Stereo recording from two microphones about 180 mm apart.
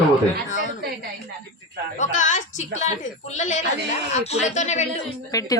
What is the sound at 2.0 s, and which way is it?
A woman's voice, 45° left (ahead or behind).